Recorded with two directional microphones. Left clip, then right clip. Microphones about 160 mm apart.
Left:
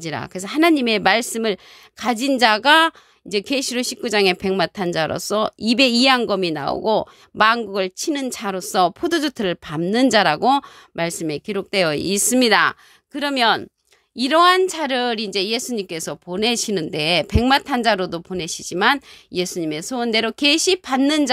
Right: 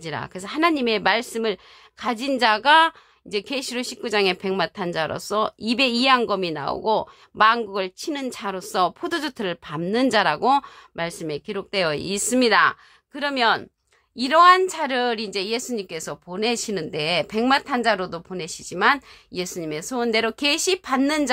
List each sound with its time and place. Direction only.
0.0 s a woman's voice: 40° left (ahead or behind)